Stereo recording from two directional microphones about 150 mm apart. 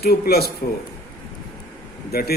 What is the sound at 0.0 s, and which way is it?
Speech, 90° left.